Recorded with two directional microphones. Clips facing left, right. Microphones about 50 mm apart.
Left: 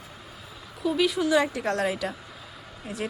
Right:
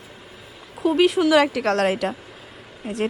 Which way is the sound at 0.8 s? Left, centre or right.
Right.